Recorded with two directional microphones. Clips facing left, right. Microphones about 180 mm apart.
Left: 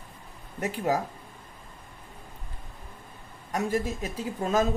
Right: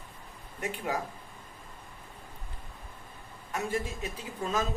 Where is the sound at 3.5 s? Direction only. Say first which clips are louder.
Left 5 dB; 40° left (ahead or behind).